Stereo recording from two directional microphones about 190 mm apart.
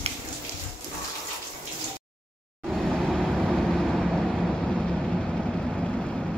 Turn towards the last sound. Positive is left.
turn(degrees=0)  # may be behind; listen again after turning